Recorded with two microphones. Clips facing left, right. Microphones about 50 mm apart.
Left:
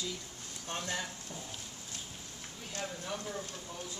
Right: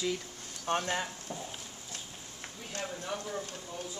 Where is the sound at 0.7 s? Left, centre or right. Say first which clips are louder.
Right 7 dB; right.